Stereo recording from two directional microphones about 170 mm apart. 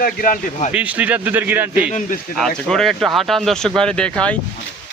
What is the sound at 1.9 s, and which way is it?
Speech, 45° left (ahead or behind).